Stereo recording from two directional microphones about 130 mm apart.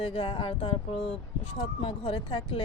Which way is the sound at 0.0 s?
45° left (ahead or behind).